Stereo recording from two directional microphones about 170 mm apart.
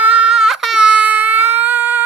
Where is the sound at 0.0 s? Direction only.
5° right (ahead or behind).